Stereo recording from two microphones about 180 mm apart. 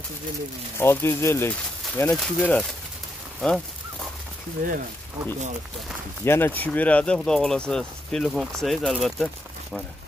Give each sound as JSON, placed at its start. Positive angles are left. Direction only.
{"t": 0.7, "sound": "speech", "side_deg": 15}
{"t": 3.3, "sound": "a sound", "side_deg": 0}
{"t": 4.6, "sound": "speech", "side_deg": -50}
{"t": 6.2, "sound": "speech", "side_deg": 10}